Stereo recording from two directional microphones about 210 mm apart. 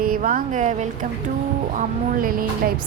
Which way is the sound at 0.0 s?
40° right (ahead or behind).